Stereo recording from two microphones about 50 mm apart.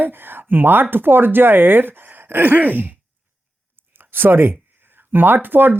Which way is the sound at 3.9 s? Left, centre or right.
Right.